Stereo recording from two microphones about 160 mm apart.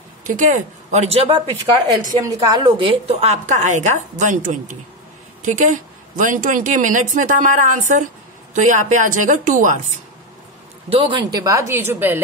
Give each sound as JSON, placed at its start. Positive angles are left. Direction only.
{"t": 0.3, "sound": "speech", "side_deg": -55}
{"t": 1.1, "sound": "speech", "side_deg": -35}
{"t": 2.1, "sound": "a woman's voice", "side_deg": -25}
{"t": 10.9, "sound": "speech", "side_deg": -30}